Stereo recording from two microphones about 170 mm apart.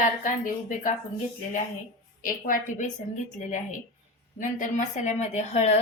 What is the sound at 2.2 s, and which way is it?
A woman's voice, 50° left (ahead or behind).